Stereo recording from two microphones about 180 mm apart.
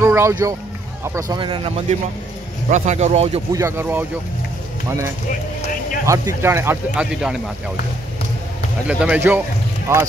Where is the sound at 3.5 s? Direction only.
15° right (ahead or behind).